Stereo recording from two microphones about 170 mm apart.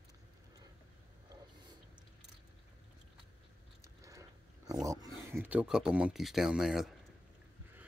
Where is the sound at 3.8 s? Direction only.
20° right (ahead or behind); by 7.0 s centre (ahead or behind).